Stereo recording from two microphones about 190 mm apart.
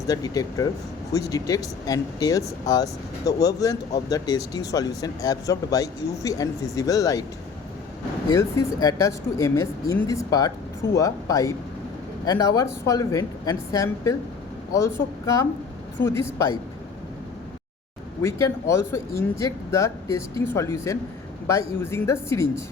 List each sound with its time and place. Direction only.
0.1 s speech: 20° left (ahead or behind)
8.3 s speech: 15° left (ahead or behind)
18.2 s speech: 15° left (ahead or behind)